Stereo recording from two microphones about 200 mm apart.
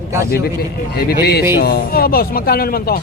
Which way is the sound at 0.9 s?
55° left (ahead or behind).